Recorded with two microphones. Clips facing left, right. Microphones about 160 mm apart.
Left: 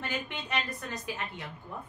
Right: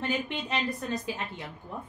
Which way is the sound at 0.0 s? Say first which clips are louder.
Right 5 dB; 30° right (ahead or behind).